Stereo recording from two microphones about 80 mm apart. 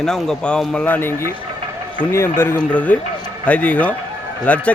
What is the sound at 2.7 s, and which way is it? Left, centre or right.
A man's voice, centre.